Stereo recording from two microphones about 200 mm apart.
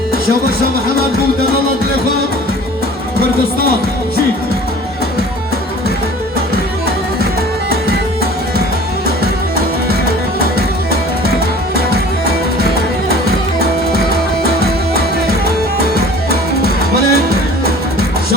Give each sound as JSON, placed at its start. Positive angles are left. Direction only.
{"t": 11.7, "sound": "music", "side_deg": -50}
{"t": 16.0, "sound": "music", "side_deg": -50}